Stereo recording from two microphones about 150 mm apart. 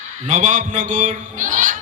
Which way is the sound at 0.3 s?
55° right (ahead or behind).